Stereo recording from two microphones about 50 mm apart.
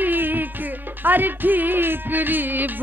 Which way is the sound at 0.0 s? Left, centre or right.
Right.